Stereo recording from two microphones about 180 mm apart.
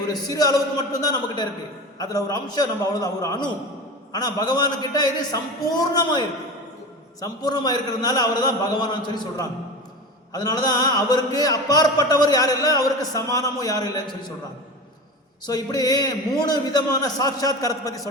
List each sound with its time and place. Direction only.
0.1 s speech: 20° left (ahead or behind)
15.4 s speech: 20° left (ahead or behind)